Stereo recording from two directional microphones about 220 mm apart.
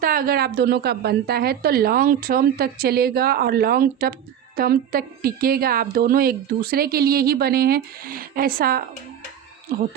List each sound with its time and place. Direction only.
0.0 s a woman's voice: 40° right (ahead or behind)